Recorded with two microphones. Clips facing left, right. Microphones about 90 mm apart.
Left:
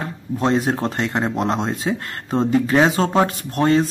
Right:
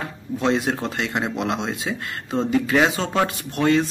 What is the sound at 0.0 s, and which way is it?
Speech, 40° left (ahead or behind).